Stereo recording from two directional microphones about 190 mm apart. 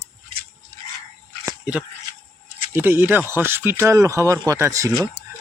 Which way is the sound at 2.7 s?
10° right (ahead or behind).